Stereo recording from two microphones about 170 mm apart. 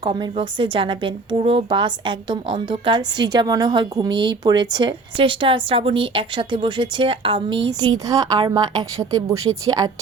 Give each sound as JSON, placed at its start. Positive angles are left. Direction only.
{"t": 0.0, "sound": "a woman's voice", "side_deg": -25}